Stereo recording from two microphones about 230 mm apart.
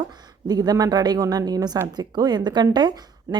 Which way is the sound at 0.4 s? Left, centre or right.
Centre.